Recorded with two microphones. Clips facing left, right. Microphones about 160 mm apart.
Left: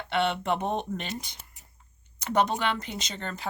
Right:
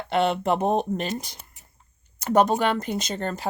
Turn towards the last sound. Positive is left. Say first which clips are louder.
# right 8 dB
turn(degrees=-45)  # may be behind; listen again after turning